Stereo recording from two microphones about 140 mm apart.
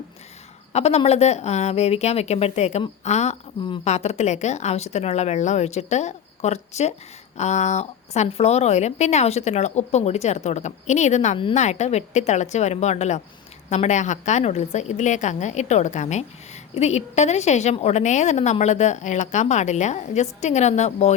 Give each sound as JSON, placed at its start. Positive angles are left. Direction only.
{"t": 0.7, "sound": "a woman's voice", "side_deg": 50}